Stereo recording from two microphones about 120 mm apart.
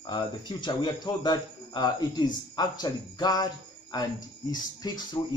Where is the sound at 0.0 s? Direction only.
40° left (ahead or behind).